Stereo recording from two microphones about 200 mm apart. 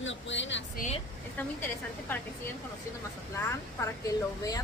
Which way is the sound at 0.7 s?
35° left (ahead or behind).